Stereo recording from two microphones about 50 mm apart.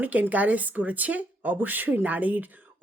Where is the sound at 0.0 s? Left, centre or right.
Right.